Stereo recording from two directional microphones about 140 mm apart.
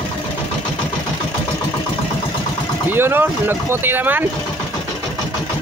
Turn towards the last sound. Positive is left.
turn(degrees=-15)  # may be behind; listen again after turning